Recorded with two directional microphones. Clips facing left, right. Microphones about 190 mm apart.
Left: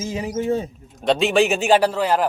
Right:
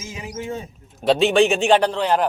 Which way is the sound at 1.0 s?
Centre (ahead or behind).